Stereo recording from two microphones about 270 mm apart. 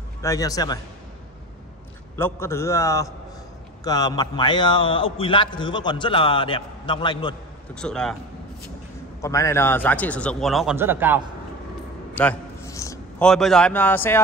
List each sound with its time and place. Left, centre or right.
0.2 s a man's voice: centre
2.1 s a man's voice: centre
7.7 s speech: centre
9.2 s speech: centre
12.2 s a man's voice: centre